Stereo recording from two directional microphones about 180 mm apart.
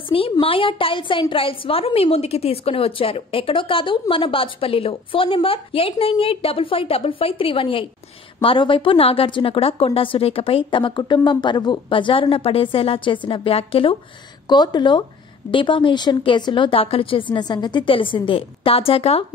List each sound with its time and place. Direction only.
0.1 s a woman's voice: 30° left (ahead or behind)